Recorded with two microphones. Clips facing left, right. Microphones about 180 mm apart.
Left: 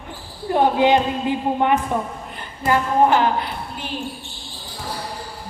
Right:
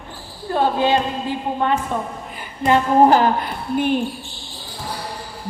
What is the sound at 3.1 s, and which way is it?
Speech, 40° right (ahead or behind).